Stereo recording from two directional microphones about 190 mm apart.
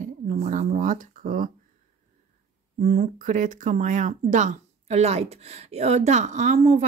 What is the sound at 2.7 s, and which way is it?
Speech, 45° right (ahead or behind).